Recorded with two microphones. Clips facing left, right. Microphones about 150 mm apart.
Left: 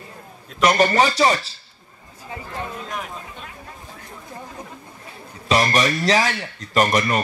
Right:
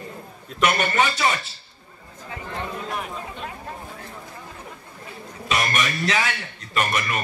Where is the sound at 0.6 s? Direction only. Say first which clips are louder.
Left 5 dB; 35° left (ahead or behind).